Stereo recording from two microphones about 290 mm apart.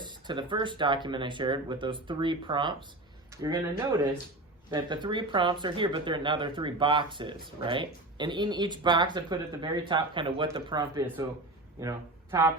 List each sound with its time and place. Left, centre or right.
0.0 s speech: centre